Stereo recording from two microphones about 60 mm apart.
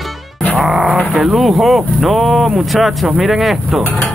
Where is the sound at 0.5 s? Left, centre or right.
Centre.